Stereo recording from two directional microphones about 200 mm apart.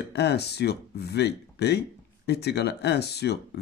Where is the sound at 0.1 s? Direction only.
55° left (ahead or behind).